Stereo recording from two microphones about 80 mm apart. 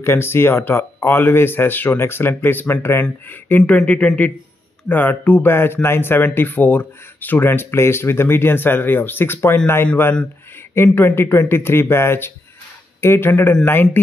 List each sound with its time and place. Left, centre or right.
0.0 s speech: left
10.7 s speech: left